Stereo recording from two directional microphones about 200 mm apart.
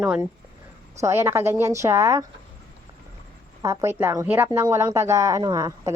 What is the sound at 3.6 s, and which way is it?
A woman's voice, 15° right (ahead or behind).